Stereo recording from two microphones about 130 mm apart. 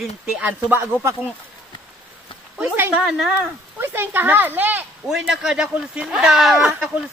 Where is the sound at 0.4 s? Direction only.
15° right (ahead or behind).